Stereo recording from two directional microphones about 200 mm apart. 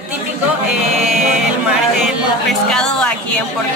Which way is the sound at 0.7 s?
Centre (ahead or behind).